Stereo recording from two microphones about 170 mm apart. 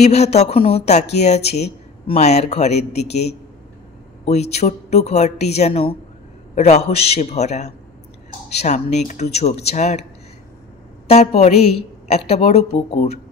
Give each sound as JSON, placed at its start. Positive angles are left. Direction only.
{"t": 0.0, "sound": "speech", "side_deg": 40}
{"t": 11.1, "sound": "speech", "side_deg": 40}